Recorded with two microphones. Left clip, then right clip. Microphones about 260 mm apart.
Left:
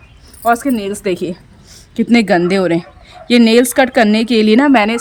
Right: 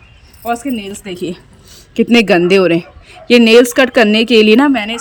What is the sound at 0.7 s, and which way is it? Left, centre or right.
A woman's voice, centre.